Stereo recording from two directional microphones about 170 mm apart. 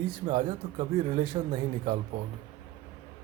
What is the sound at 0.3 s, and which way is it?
Speech, 35° right (ahead or behind).